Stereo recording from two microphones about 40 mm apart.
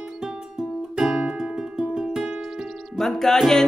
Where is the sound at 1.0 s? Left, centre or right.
Centre.